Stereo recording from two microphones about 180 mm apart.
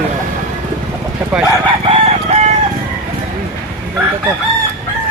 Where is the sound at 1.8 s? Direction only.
30° right (ahead or behind).